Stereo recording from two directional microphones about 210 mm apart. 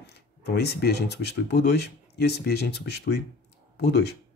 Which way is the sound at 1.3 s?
50° left (ahead or behind).